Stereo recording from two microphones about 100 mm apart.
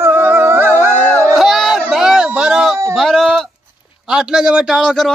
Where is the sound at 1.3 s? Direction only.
Centre (ahead or behind).